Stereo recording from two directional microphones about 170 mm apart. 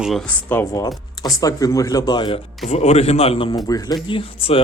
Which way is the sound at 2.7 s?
40° left (ahead or behind).